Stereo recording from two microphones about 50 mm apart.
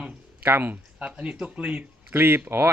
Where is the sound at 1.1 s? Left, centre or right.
Right.